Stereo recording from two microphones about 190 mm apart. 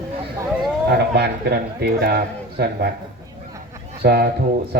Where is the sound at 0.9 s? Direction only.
60° right (ahead or behind).